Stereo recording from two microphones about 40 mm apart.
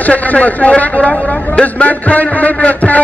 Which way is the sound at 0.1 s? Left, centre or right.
Left.